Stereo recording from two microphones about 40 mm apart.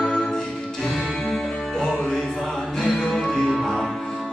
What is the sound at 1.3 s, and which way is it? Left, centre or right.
Music, centre.